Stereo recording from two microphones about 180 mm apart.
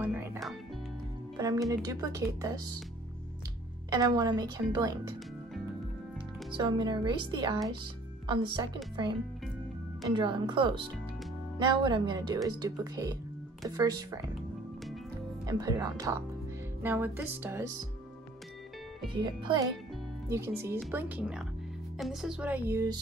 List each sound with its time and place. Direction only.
0.0 s music: 10° right (ahead or behind)
1.3 s speech: 20° right (ahead or behind)
3.9 s speech: 20° right (ahead or behind)
6.5 s speech: 25° right (ahead or behind)
15.4 s speech: 20° right (ahead or behind)
16.8 s music: 10° right (ahead or behind)
19.1 s speech: 25° right (ahead or behind)
20.2 s music: 15° right (ahead or behind)
21.9 s speech: centre (ahead or behind)